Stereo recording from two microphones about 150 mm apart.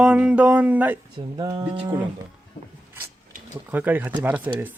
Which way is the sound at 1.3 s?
25° right (ahead or behind).